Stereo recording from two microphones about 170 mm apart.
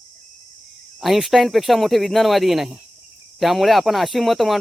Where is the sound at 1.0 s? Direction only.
Centre (ahead or behind).